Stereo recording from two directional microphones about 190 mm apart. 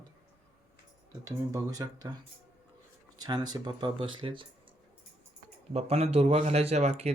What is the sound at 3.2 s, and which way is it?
Speech, 20° right (ahead or behind).